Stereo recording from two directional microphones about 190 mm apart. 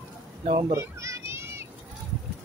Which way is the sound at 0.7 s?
15° right (ahead or behind).